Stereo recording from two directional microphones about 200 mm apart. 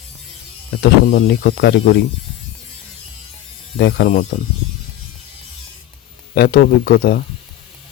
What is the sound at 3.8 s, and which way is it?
Speech, 55° left (ahead or behind).